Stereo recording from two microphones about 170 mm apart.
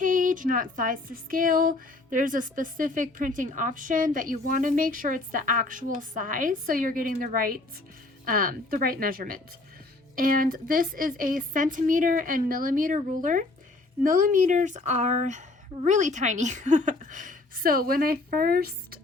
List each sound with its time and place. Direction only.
0.0 s speech: 50° right (ahead or behind)